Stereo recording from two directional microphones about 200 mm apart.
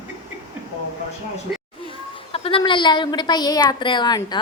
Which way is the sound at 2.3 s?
25° left (ahead or behind).